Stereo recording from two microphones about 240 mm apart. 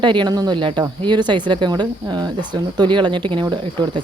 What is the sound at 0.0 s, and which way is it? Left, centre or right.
Speech, centre.